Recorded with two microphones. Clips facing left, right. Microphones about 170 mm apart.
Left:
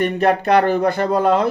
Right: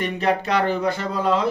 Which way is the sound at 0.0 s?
55° left (ahead or behind).